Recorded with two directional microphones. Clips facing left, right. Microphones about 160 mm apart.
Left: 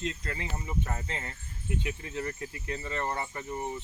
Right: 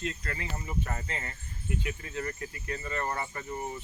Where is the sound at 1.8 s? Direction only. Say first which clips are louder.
Left 2 dB; 20° left (ahead or behind).